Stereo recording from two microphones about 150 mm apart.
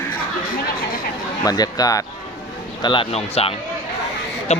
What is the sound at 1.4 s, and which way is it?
Speech, 25° left (ahead or behind).